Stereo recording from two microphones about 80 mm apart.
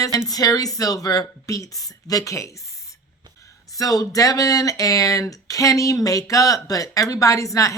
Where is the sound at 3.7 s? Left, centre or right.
Left.